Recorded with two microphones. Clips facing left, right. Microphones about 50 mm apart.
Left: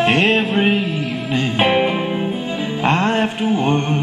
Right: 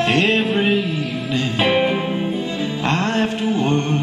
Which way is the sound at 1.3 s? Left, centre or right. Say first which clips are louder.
Left 2 dB; left.